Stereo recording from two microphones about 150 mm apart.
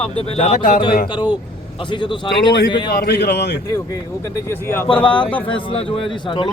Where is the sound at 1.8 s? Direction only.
30° left (ahead or behind).